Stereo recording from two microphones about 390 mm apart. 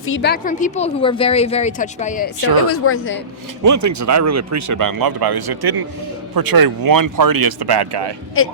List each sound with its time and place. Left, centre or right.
0.0 s a woman's voice: left
2.6 s a woman's voice: left
3.6 s speech: right
8.4 s a woman's voice: left